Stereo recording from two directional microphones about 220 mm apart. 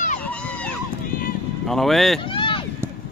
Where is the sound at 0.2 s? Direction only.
5° left (ahead or behind).